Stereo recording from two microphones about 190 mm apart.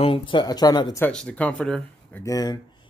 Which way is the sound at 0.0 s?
25° left (ahead or behind).